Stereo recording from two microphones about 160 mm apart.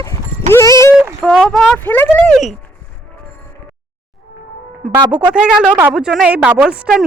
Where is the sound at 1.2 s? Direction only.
Centre (ahead or behind).